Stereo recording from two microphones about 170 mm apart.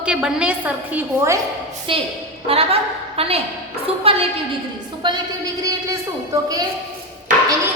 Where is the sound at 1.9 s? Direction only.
30° right (ahead or behind).